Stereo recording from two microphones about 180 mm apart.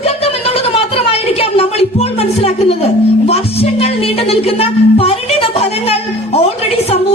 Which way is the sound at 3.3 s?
35° left (ahead or behind).